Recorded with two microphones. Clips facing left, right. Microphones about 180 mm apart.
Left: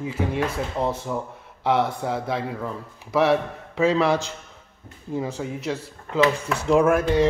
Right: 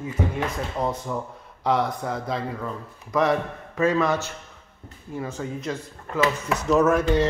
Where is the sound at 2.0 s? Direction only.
5° left (ahead or behind).